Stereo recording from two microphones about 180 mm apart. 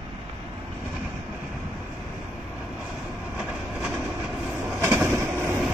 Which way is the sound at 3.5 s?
5° right (ahead or behind).